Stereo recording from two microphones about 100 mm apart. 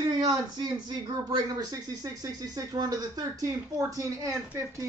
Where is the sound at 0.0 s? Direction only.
40° right (ahead or behind).